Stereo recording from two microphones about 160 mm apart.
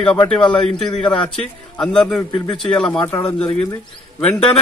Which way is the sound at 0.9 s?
30° left (ahead or behind).